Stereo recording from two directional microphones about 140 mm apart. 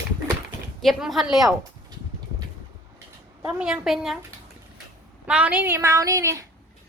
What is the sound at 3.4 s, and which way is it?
Speech, 5° right (ahead or behind).